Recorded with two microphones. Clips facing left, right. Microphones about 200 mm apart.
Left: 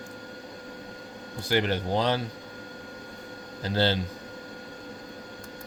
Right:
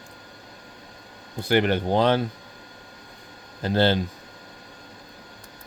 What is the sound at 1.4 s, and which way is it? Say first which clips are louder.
Speech: right 5 dB; 60° right (ahead or behind).